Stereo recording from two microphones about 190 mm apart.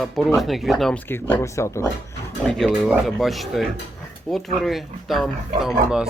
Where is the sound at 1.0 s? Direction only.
10° left (ahead or behind).